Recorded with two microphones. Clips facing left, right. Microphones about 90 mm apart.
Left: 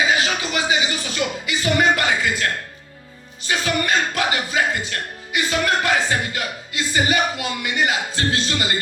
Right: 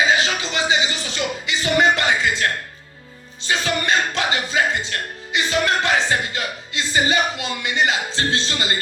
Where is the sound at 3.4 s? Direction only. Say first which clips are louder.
Even; 25° right (ahead or behind).